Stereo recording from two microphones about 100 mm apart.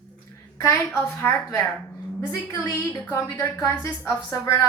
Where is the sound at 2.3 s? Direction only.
30° left (ahead or behind).